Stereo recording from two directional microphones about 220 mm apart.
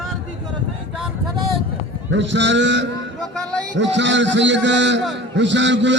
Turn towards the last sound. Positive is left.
turn(degrees=-55)  # may be behind; listen again after turning